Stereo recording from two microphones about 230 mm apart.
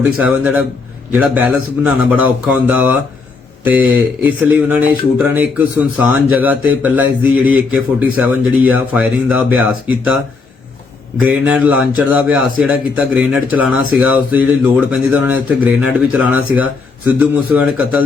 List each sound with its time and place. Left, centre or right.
0.0 s a man's voice: centre
11.2 s a man's voice: centre